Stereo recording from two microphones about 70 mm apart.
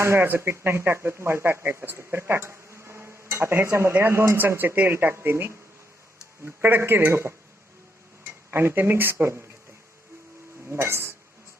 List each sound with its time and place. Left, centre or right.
0.0 s speech: right
10.7 s speech: right